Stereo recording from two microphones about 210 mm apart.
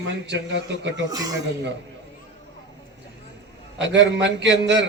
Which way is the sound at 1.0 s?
15° right (ahead or behind).